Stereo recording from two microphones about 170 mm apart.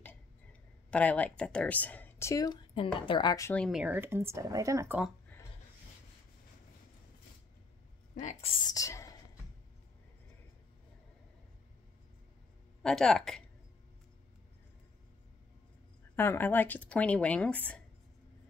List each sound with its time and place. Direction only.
0.0 s speech: 10° left (ahead or behind)
3.5 s speech: centre (ahead or behind)
8.1 s a sound: 45° left (ahead or behind)
8.5 s whispering: 20° left (ahead or behind)
12.8 s a woman's voice: 5° left (ahead or behind)
16.2 s speech: 10° left (ahead or behind)